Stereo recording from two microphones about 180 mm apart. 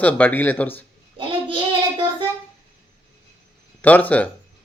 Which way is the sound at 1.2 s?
30° right (ahead or behind).